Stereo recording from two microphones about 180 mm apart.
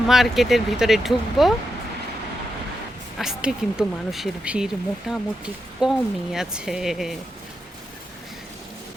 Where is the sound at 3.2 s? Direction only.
Centre (ahead or behind).